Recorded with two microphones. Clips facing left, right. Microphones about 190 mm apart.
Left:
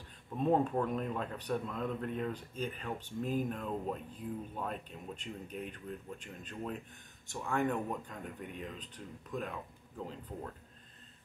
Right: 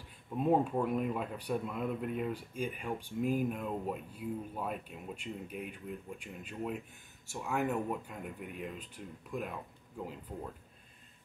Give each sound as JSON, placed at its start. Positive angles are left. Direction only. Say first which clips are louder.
{"t": 0.4, "sound": "speech", "louder": "right 1 dB", "side_deg": -10}